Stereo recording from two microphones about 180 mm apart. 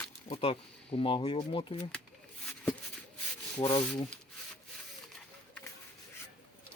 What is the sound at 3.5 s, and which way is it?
Speech, 15° left (ahead or behind).